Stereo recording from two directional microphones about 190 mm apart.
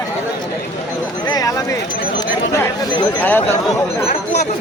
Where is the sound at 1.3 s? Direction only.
20° left (ahead or behind).